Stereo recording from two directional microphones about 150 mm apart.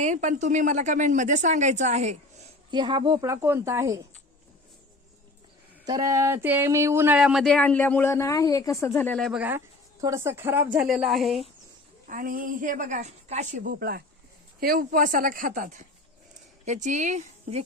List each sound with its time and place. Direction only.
0.0 s speech: 55° right (ahead or behind)
2.6 s a woman's voice: 30° right (ahead or behind)
5.8 s speech: 25° right (ahead or behind)
7.2 s a woman's voice: 5° right (ahead or behind); by 9.1 s 15° left (ahead or behind)
9.1 s speech: centre (ahead or behind)
10.0 s speech: 20° right (ahead or behind); by 11.3 s centre (ahead or behind)
12.0 s speech: 65° right (ahead or behind); by 14.0 s 85° right
14.6 s speech: 70° right (ahead or behind); by 17.6 s 55° right (ahead or behind)